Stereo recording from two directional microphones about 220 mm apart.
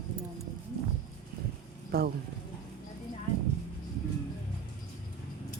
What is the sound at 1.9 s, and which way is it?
Speech, 45° right (ahead or behind).